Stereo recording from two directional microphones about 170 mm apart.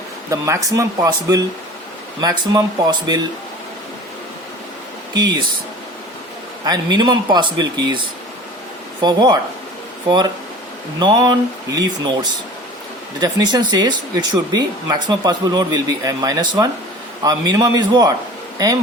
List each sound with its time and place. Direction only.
0.3 s speech: 20° right (ahead or behind)
5.1 s speech: 25° right (ahead or behind)
6.7 s speech: 25° right (ahead or behind)
11.0 s speech: 25° right (ahead or behind)
13.1 s speech: 25° right (ahead or behind)